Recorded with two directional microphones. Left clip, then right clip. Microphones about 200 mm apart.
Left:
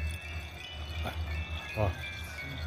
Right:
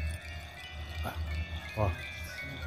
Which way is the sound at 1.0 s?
Centre (ahead or behind).